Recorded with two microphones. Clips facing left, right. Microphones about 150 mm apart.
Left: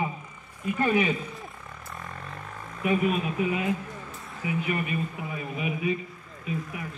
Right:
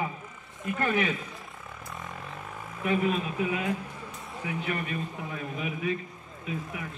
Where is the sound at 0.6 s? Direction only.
10° left (ahead or behind).